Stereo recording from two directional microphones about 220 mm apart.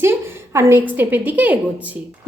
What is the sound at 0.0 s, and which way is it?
A woman's voice, 10° right (ahead or behind).